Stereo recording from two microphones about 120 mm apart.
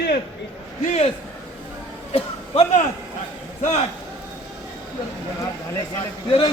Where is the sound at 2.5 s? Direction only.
60° left (ahead or behind).